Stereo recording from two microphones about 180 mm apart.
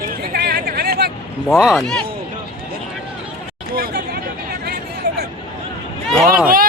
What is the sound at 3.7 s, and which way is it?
Speech, 55° right (ahead or behind).